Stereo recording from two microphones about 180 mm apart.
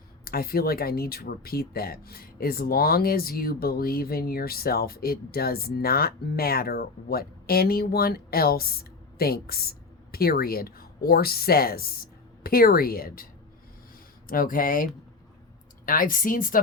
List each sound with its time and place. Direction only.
0.3 s speech: 55° left (ahead or behind)
14.3 s speech: 50° left (ahead or behind)
15.9 s speech: 50° left (ahead or behind)